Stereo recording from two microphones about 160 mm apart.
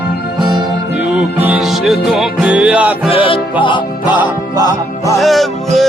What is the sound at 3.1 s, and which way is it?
Music, 35° left (ahead or behind).